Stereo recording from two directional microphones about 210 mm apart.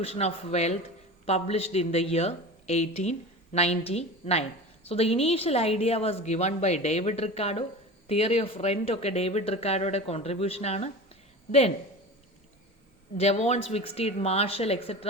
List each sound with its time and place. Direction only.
0.0 s speech: 30° left (ahead or behind)
13.1 s speech: 30° left (ahead or behind)